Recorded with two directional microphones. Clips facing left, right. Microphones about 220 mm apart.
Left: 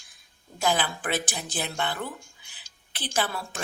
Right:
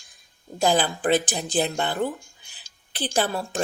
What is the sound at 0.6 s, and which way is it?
A woman's voice, 35° right (ahead or behind).